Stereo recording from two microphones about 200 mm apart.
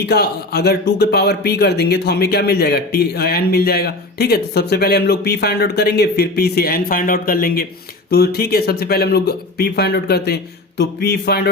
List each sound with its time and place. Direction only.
0.0 s speech: 55° left (ahead or behind)